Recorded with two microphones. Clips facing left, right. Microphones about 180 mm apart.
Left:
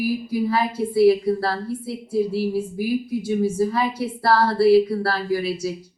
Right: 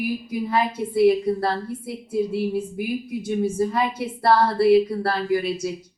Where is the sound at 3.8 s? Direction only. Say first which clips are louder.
Left 1 dB; centre (ahead or behind).